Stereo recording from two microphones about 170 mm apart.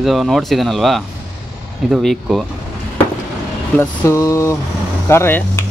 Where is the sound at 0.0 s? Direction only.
Centre (ahead or behind).